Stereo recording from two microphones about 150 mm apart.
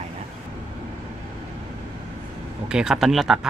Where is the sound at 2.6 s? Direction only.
5° right (ahead or behind).